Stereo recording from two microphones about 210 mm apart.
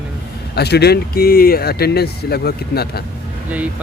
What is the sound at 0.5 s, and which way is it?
Speech, 50° left (ahead or behind).